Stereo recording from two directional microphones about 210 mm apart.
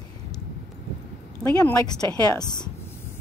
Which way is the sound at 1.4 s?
15° left (ahead or behind).